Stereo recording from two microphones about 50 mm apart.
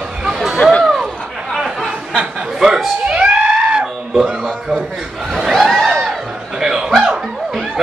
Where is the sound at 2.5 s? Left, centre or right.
Centre.